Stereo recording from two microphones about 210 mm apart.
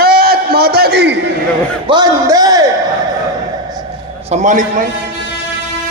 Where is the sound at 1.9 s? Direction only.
20° right (ahead or behind).